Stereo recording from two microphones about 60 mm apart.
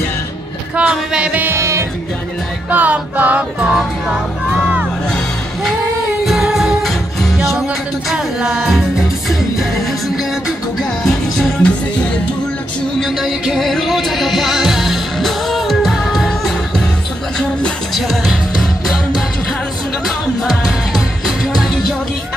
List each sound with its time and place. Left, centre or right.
0.7 s speech: centre
1.6 s music: right
2.7 s music: right
3.6 s music: centre
6.2 s music: centre
11.6 s music: centre
13.0 s music: centre
17.9 s music: centre